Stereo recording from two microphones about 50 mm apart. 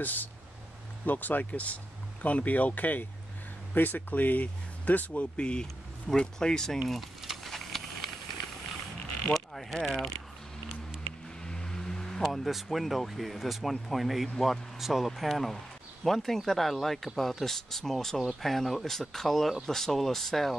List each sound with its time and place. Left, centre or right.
0.0 s speech: left
5.4 s speech: centre
6.9 s a sound: centre
9.3 s mechanisms: centre
11.4 s vehicle: centre
12.2 s speech: centre